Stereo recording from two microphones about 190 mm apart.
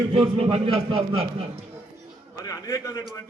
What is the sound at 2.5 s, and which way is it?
Speech, 20° left (ahead or behind).